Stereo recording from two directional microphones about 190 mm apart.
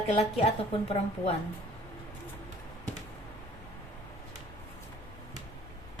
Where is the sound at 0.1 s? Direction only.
30° left (ahead or behind).